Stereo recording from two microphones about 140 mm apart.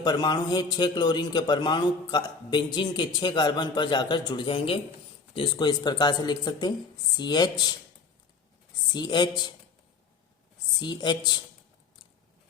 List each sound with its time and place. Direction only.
0.0 s a man's voice: 30° left (ahead or behind)
8.9 s a man's voice: 30° left (ahead or behind)
10.8 s a man's voice: 30° left (ahead or behind)